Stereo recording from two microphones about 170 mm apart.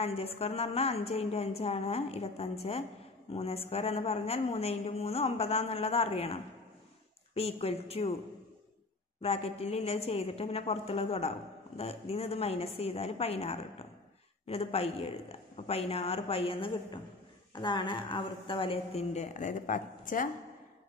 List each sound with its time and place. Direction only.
0.0 s a woman's voice: 35° left (ahead or behind)
9.2 s a woman's voice: 35° left (ahead or behind)